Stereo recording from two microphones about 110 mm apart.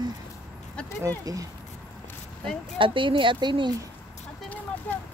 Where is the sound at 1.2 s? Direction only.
30° right (ahead or behind).